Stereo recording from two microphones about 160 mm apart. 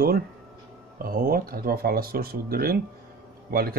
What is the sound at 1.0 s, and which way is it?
Speech, 65° right (ahead or behind).